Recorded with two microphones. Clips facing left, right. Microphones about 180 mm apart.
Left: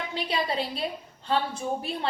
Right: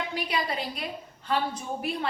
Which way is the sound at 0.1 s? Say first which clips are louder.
Left 1 dB; 25° left (ahead or behind).